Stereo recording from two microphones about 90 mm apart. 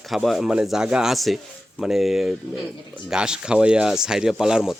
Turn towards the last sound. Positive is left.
turn(degrees=-5)  # may be behind; listen again after turning